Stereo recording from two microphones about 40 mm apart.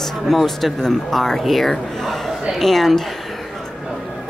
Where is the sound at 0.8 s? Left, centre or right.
Centre.